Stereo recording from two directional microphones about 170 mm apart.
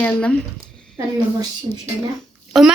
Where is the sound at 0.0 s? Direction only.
10° left (ahead or behind).